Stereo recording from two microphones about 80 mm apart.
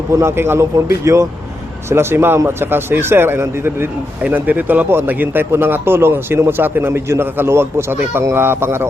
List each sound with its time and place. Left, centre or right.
0.1 s a man's voice: right
4.2 s a man's voice: right